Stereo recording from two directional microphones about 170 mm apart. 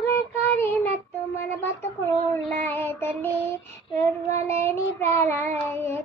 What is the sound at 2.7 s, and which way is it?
Child singing, 15° left (ahead or behind).